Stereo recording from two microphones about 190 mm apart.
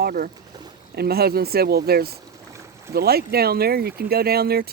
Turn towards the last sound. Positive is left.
turn(degrees=-55)  # may be behind; listen again after turning